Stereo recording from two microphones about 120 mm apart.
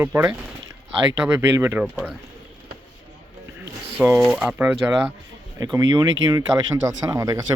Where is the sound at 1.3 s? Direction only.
20° right (ahead or behind).